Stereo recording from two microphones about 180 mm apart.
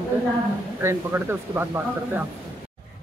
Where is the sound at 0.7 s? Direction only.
15° right (ahead or behind).